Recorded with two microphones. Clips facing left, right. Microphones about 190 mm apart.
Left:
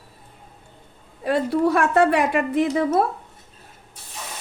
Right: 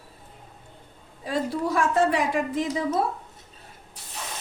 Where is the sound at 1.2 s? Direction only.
65° left (ahead or behind).